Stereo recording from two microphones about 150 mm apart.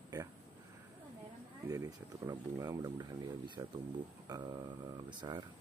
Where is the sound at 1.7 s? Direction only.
20° right (ahead or behind).